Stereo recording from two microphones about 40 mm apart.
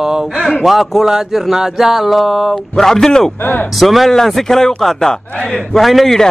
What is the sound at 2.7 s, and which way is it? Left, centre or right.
Speech, centre.